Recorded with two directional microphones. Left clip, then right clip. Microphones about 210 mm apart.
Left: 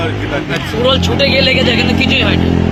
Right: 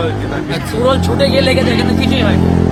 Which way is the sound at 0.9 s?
15° right (ahead or behind).